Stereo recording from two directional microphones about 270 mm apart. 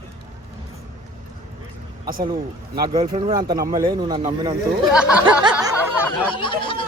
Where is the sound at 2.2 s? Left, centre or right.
Centre.